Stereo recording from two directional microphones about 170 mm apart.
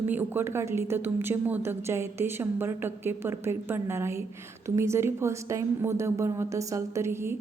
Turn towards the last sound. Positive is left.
turn(degrees=-15)  # may be behind; listen again after turning